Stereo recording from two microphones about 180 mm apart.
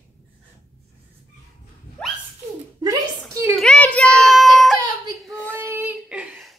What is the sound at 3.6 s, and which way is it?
Child singing, 5° left (ahead or behind).